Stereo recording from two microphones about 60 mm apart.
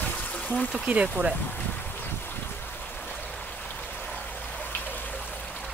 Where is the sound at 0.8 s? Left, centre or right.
Centre.